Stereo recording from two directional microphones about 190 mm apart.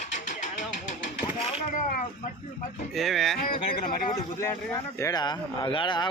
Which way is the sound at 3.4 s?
45° left (ahead or behind).